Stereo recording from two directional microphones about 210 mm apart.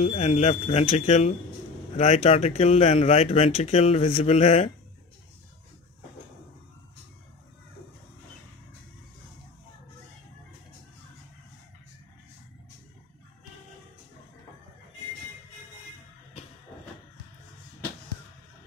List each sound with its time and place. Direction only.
0.0 s speech: 30° left (ahead or behind)